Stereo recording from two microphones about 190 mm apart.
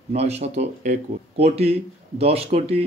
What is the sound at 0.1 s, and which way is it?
A man's voice, 35° right (ahead or behind).